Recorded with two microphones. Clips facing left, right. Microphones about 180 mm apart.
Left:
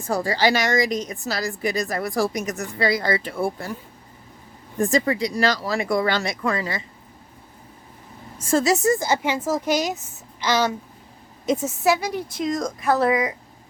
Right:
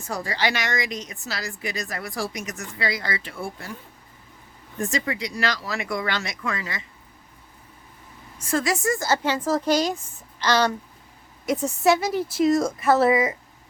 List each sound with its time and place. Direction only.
0.1 s speech: 35° left (ahead or behind)
4.8 s speech: 35° left (ahead or behind)
8.4 s a woman's voice: 25° left (ahead or behind); by 13.3 s 5° right (ahead or behind)